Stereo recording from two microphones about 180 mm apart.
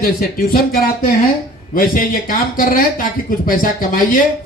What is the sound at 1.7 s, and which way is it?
Speech, 50° left (ahead or behind).